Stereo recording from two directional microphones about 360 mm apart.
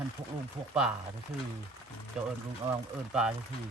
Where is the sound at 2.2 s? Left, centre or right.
Centre.